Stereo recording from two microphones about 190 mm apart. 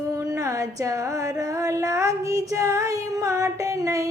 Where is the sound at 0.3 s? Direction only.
15° right (ahead or behind).